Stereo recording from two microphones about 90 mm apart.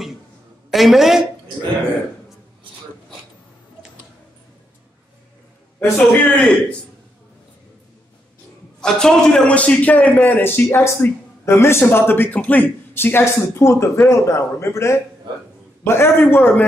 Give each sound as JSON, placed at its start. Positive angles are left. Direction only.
{"t": 0.7, "sound": "a woman's voice", "side_deg": 0}
{"t": 5.9, "sound": "a man's voice", "side_deg": 5}
{"t": 8.8, "sound": "a man's voice", "side_deg": 5}